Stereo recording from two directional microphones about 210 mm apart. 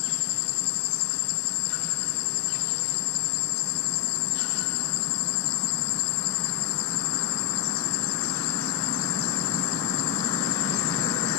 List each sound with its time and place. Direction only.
10.2 s vehicle: 25° left (ahead or behind)